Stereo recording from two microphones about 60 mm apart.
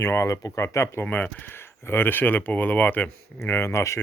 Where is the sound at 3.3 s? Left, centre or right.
Left.